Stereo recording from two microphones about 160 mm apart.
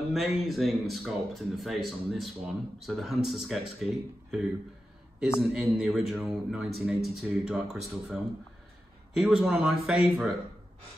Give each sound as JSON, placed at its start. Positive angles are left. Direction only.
{"t": 0.1, "sound": "speech", "side_deg": 0}
{"t": 5.4, "sound": "speech", "side_deg": -5}